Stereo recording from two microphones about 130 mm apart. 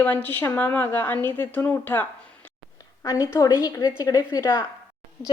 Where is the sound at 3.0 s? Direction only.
25° left (ahead or behind).